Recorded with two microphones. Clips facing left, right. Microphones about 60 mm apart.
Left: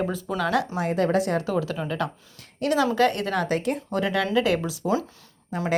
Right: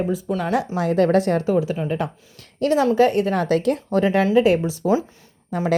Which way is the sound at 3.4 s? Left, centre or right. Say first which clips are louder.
Right 5 dB; right.